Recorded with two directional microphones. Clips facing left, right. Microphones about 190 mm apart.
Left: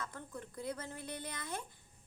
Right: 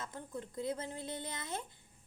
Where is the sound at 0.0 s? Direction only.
20° right (ahead or behind).